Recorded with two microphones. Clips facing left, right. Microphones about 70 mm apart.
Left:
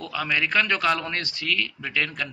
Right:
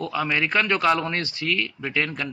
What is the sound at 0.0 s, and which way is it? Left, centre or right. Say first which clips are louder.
A man's voice: right 2 dB; centre.